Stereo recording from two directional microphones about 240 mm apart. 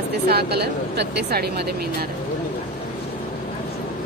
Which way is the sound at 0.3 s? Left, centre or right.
Right.